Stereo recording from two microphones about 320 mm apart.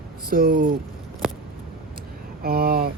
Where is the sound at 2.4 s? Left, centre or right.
Right.